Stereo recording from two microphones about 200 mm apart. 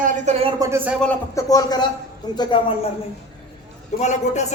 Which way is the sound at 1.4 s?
20° left (ahead or behind).